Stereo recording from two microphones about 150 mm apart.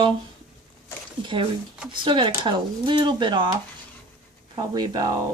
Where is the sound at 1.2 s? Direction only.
35° right (ahead or behind).